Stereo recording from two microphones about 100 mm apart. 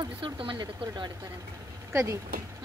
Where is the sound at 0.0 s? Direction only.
55° right (ahead or behind).